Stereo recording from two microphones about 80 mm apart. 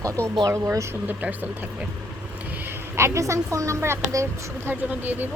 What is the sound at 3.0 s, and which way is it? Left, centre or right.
A woman's voice, right.